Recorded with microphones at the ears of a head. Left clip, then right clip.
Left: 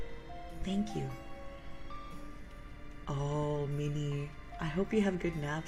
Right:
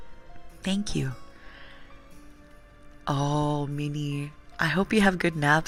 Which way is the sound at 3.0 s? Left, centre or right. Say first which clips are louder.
Right 9 dB; right.